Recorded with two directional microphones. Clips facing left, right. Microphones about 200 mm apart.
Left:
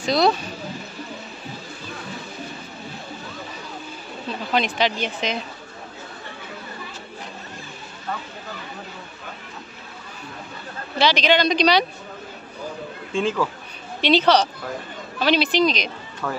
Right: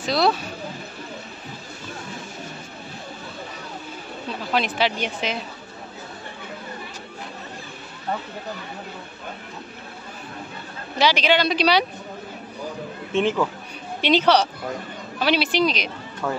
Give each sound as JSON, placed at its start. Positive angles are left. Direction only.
{"t": 0.0, "sound": "speech", "side_deg": -5}
{"t": 4.6, "sound": "speech", "side_deg": -5}
{"t": 11.0, "sound": "speech", "side_deg": -10}
{"t": 13.1, "sound": "speech", "side_deg": -20}